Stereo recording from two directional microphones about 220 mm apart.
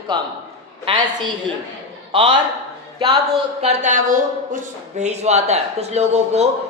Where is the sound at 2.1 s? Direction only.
20° right (ahead or behind).